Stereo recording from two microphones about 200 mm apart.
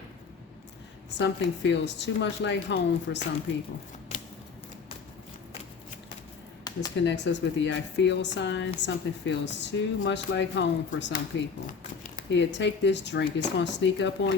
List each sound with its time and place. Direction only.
1.2 s a woman's voice: 60° left (ahead or behind)
6.7 s a sound: 20° left (ahead or behind)
7.0 s a woman's voice: 65° left (ahead or behind)